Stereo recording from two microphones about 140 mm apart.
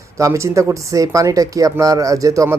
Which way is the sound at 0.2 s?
20° right (ahead or behind).